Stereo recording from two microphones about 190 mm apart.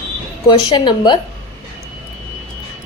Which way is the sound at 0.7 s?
25° left (ahead or behind).